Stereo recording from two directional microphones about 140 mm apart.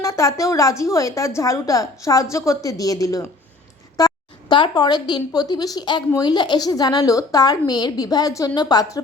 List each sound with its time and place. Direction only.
0.0 s a woman's voice: 20° left (ahead or behind)